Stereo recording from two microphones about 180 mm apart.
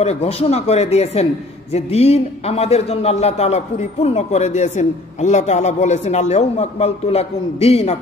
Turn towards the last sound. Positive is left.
turn(degrees=35)  # may be behind; listen again after turning